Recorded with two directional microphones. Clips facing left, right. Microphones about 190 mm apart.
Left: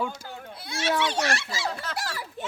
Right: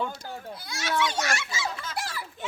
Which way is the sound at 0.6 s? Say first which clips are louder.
Left 2 dB; 30° left (ahead or behind).